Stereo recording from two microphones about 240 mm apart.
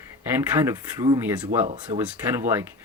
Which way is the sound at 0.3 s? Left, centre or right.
Centre.